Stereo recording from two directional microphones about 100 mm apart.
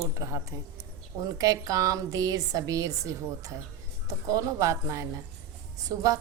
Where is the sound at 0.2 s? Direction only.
35° right (ahead or behind).